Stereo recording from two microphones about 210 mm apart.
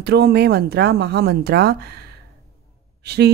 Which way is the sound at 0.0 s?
50° right (ahead or behind).